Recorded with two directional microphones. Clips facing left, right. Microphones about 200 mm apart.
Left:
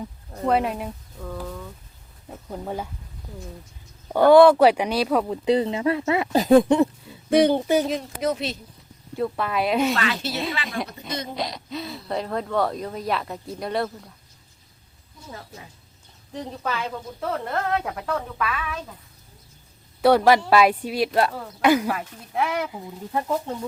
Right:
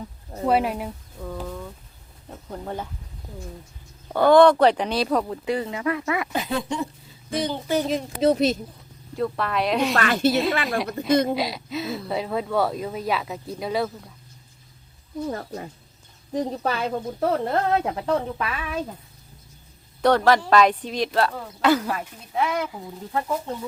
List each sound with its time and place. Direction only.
0.4 s speech: 5° right (ahead or behind)
2.5 s speech: 5° left (ahead or behind)
4.1 s speech: 10° left (ahead or behind)
5.5 s speech: 25° left (ahead or behind)
6.6 s speech: 55° left (ahead or behind)
8.2 s speech: 35° right (ahead or behind)
9.1 s speech: 5° left (ahead or behind)
9.9 s speech: 50° right (ahead or behind)
11.3 s speech: 5° right (ahead or behind)
15.3 s speech: 50° right (ahead or behind)
16.3 s speech: 40° right (ahead or behind)
20.0 s speech: 10° left (ahead or behind)